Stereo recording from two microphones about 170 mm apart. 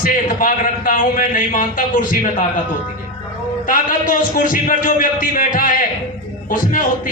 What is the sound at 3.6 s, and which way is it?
A man's voice, 50° left (ahead or behind).